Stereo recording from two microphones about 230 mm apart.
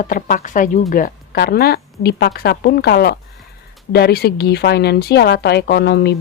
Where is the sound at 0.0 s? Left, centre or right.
Left.